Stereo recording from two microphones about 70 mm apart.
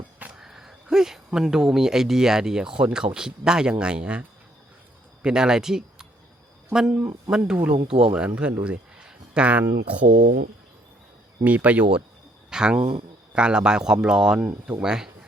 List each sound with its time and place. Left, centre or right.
0.3 s speech: centre
8.6 s a sound: centre
9.8 s speech: right
11.4 s speech: right